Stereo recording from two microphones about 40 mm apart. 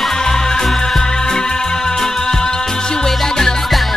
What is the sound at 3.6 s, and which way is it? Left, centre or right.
Music, centre.